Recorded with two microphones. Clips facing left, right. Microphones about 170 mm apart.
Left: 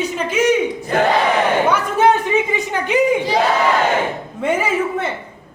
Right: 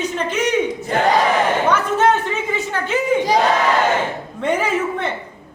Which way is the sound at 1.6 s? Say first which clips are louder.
Left 1 dB; 10° left (ahead or behind).